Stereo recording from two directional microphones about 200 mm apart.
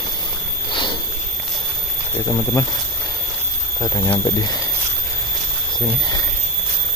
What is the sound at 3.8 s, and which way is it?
Speech, 20° left (ahead or behind).